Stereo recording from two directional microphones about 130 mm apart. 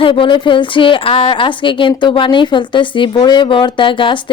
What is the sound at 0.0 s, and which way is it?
A woman's voice, 40° left (ahead or behind).